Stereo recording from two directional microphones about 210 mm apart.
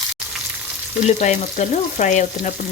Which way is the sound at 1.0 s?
35° left (ahead or behind).